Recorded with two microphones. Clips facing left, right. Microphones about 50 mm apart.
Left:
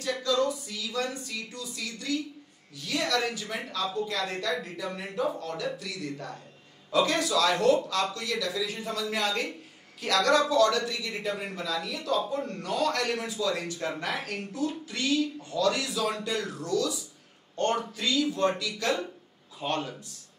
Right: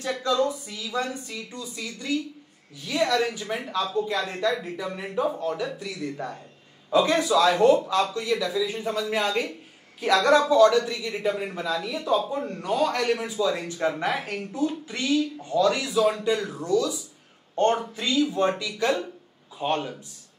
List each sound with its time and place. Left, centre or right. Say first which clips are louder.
0.0 s speech: right 3 dB; right